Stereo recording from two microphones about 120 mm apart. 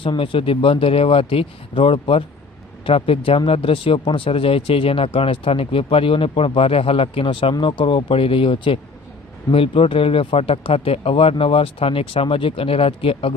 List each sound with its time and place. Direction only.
0.0 s speech: 45° left (ahead or behind)